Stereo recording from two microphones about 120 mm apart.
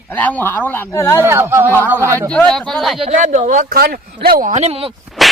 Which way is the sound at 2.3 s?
10° left (ahead or behind).